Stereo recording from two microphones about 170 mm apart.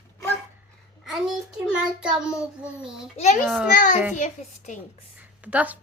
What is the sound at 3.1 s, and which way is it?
A child's voice, 40° left (ahead or behind).